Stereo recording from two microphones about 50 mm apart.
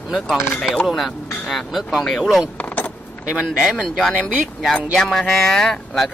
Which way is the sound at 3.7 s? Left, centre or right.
Centre.